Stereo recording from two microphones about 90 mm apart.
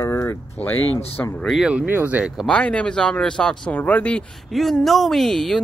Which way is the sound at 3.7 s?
20° left (ahead or behind).